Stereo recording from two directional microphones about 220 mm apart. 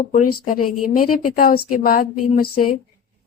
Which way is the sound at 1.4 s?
40° left (ahead or behind).